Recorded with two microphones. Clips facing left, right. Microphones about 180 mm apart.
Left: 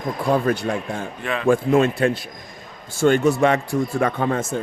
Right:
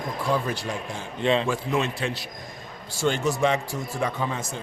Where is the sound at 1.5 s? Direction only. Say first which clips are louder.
Left 9 dB; 50° left (ahead or behind).